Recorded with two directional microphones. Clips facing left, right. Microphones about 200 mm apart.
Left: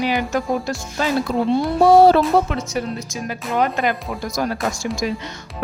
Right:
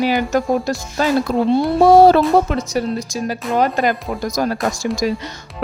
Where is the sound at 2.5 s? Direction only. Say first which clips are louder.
Right 4 dB; 35° right (ahead or behind).